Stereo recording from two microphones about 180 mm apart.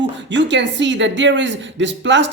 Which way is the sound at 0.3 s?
80° right.